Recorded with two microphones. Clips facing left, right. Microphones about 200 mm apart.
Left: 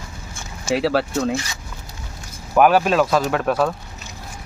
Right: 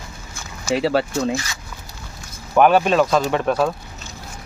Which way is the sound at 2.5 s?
5° left (ahead or behind).